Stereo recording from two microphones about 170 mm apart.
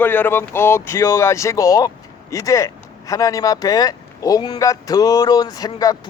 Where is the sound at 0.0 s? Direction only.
10° left (ahead or behind).